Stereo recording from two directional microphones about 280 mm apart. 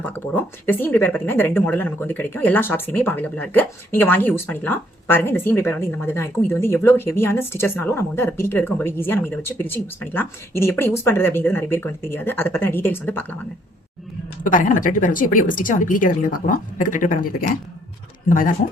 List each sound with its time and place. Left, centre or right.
0.0 s speech: centre
14.4 s speech: left